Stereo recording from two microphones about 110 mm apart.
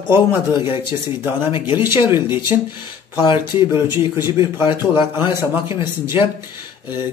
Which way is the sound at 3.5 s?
25° right (ahead or behind).